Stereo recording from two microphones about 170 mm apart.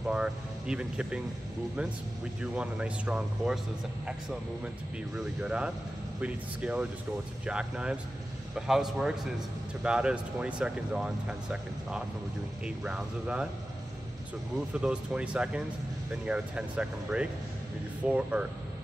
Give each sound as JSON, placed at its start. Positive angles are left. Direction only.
{"t": 0.1, "sound": "speech", "side_deg": -5}
{"t": 2.4, "sound": "speech", "side_deg": -5}
{"t": 5.1, "sound": "speech", "side_deg": -5}
{"t": 14.7, "sound": "speech", "side_deg": -5}